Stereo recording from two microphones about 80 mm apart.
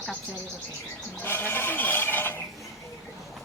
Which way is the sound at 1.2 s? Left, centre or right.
Left.